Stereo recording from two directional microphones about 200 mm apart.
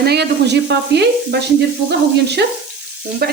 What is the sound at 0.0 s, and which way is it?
Stir, 55° right (ahead or behind).